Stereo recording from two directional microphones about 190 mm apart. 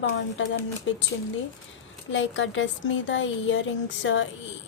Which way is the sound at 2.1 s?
85° left.